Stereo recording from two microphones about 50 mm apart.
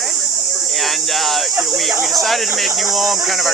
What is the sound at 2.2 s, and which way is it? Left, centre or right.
Speech, centre.